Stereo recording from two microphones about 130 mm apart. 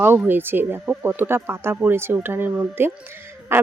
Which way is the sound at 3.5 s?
20° right (ahead or behind).